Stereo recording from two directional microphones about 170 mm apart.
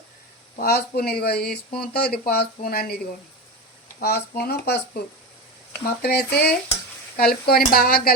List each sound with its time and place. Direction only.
0.5 s speech: 65° left (ahead or behind)
4.0 s speech: 70° left (ahead or behind)
6.0 s speech: 70° left (ahead or behind)